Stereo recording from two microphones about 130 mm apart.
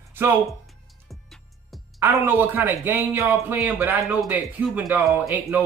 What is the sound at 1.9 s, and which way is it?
Speech, 20° right (ahead or behind).